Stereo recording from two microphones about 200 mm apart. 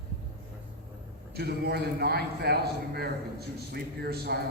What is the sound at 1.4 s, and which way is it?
A man's voice, 55° right (ahead or behind).